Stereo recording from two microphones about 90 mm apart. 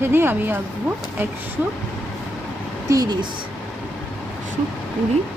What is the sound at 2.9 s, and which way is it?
Speech, 35° right (ahead or behind).